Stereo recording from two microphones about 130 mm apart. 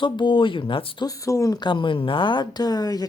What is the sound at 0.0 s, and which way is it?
Speech, 40° left (ahead or behind).